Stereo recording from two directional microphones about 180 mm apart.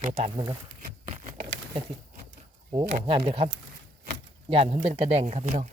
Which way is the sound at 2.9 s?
30° right (ahead or behind).